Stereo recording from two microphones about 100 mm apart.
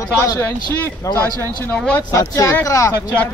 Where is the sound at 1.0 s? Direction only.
35° left (ahead or behind).